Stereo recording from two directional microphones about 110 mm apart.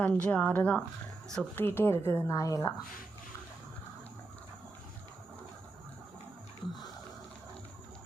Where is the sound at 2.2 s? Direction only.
30° left (ahead or behind).